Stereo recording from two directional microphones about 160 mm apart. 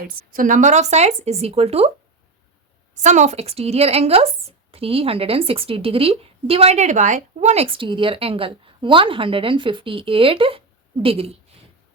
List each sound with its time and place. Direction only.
0.3 s speech: 55° right (ahead or behind); by 1.9 s 40° right (ahead or behind)
2.9 s a woman's voice: 50° right (ahead or behind)